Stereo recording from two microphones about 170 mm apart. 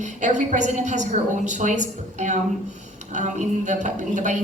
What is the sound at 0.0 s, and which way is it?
Speech, 45° right (ahead or behind).